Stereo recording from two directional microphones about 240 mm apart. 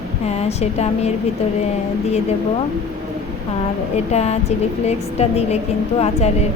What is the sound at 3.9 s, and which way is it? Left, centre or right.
A woman's voice, left.